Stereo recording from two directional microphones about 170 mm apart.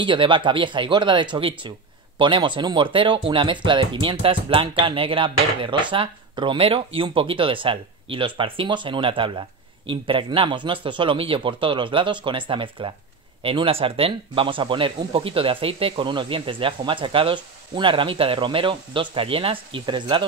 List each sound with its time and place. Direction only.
0.0 s speech: 30° right (ahead or behind)